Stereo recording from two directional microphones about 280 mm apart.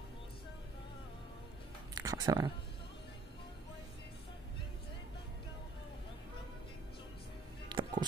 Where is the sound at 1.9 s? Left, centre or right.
Centre.